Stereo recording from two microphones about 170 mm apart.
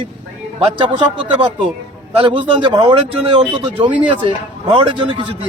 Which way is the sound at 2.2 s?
30° right (ahead or behind).